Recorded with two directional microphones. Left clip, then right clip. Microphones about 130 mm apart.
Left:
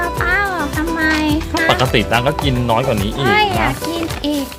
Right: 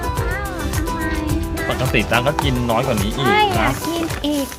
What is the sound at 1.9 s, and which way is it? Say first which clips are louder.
Speech: left 2 dB; 85° left.